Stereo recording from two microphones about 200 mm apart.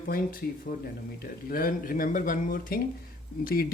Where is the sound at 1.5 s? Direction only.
45° left (ahead or behind).